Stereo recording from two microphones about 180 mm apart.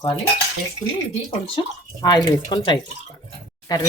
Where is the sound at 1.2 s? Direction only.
30° left (ahead or behind).